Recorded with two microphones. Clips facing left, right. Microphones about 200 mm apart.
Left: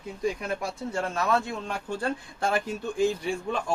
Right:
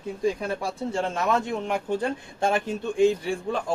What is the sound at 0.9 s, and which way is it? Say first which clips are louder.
A man's voice: right 1 dB; 25° right (ahead or behind).